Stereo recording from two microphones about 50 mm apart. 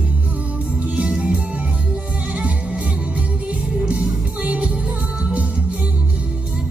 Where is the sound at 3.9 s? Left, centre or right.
Right.